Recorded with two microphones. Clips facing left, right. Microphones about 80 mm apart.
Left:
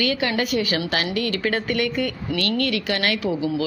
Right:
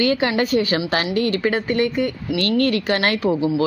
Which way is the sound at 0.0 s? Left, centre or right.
Right.